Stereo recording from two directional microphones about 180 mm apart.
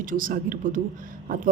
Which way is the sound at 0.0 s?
50° right (ahead or behind).